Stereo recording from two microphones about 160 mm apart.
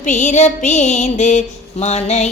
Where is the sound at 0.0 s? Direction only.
50° left (ahead or behind).